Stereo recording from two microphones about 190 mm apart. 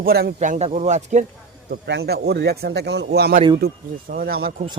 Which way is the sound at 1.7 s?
60° right (ahead or behind).